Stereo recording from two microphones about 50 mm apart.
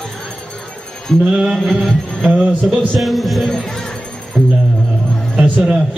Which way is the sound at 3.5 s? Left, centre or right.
Centre.